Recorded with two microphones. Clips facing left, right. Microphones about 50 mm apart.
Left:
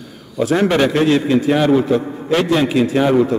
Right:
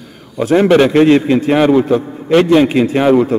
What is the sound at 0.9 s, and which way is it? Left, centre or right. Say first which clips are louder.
A man's voice: right 5 dB; right.